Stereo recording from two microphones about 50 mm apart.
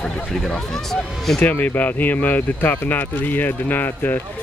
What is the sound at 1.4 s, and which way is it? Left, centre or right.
Speech, left.